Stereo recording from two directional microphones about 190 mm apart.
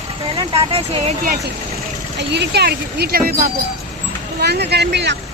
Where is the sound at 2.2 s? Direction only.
60° right (ahead or behind).